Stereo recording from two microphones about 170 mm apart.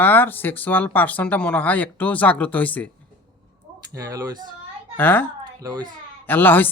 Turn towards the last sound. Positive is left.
turn(degrees=10)  # may be behind; listen again after turning